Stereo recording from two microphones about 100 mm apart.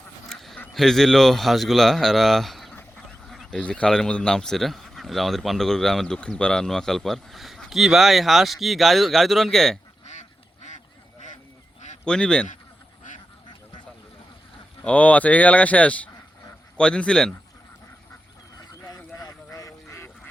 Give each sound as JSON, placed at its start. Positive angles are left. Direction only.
{"t": 0.3, "sound": "quack", "side_deg": 5}
{"t": 0.7, "sound": "speech", "side_deg": 0}
{"t": 12.0, "sound": "speech", "side_deg": 10}
{"t": 14.8, "sound": "speech", "side_deg": 15}
{"t": 18.7, "sound": "a sound", "side_deg": 35}
{"t": 19.1, "sound": "quack", "side_deg": 35}